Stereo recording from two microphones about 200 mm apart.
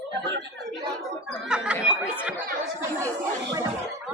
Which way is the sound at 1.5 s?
5° right (ahead or behind).